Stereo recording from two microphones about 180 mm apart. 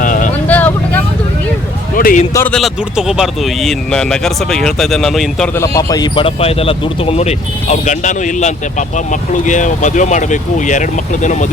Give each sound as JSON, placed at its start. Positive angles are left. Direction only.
{"t": 0.0, "sound": "vehicle", "side_deg": 45}
{"t": 0.4, "sound": "vehicle", "side_deg": 10}
{"t": 2.0, "sound": "a man's voice", "side_deg": 50}
{"t": 2.3, "sound": "a man's voice", "side_deg": 10}
{"t": 2.6, "sound": "speech", "side_deg": 0}
{"t": 5.5, "sound": "speech", "side_deg": 15}